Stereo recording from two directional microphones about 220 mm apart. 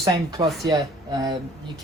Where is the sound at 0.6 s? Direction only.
20° right (ahead or behind).